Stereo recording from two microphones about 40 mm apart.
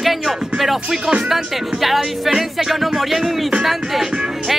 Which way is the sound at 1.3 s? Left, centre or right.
Centre.